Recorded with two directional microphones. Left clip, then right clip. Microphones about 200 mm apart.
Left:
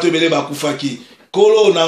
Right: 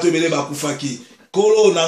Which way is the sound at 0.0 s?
30° left (ahead or behind).